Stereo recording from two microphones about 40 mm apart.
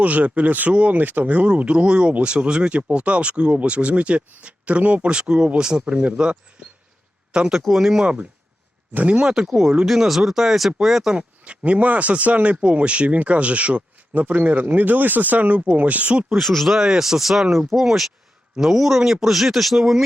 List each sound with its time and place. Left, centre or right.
0.0 s speech: right
1.5 s speech: right
7.6 s speech: centre
8.0 s speech: right
9.3 s speech: centre
11.2 s speech: right
16.4 s speech: centre
16.6 s speech: centre